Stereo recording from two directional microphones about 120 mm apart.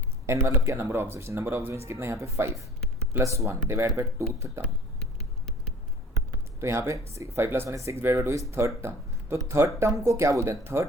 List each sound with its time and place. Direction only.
0.4 s speech: 25° right (ahead or behind)
6.6 s speech: 20° right (ahead or behind)